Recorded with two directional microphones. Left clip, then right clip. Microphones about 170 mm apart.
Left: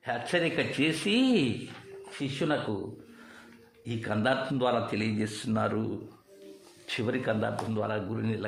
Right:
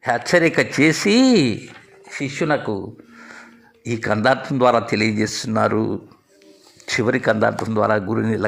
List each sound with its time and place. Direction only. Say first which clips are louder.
0.0 s a man's voice: right 12 dB; 40° right (ahead or behind)
3.8 s a man's voice: right 11 dB; 40° right (ahead or behind)
6.8 s a man's voice: right 12 dB; 40° right (ahead or behind)